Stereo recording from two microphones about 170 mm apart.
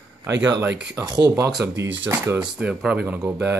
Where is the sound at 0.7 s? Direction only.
80° right.